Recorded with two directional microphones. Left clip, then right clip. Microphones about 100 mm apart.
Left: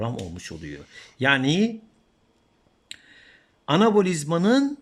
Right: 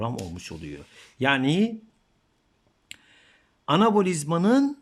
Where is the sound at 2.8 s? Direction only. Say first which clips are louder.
Left 3 dB; 10° right (ahead or behind).